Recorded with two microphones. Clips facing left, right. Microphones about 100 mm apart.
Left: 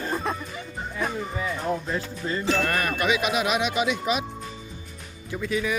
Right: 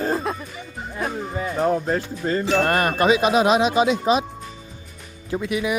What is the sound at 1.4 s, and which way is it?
Speech, 45° right (ahead or behind).